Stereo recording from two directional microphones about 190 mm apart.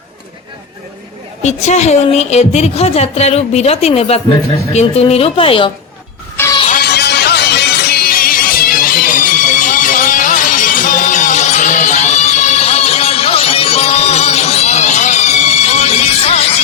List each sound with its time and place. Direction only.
1.4 s a woman's voice: 35° left (ahead or behind)
6.3 s music: 15° left (ahead or behind)
6.7 s music: 60° left (ahead or behind); by 16.6 s 30° left (ahead or behind)